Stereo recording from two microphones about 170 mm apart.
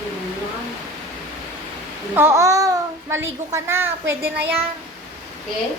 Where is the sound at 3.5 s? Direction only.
15° right (ahead or behind).